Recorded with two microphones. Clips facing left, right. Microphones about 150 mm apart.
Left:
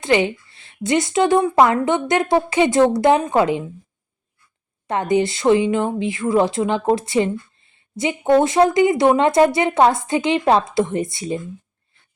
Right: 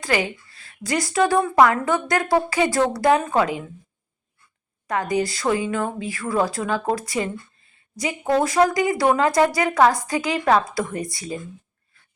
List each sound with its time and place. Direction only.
0.0 s speech: 25° left (ahead or behind)
4.9 s speech: 25° left (ahead or behind)
11.9 s a sound: 25° left (ahead or behind)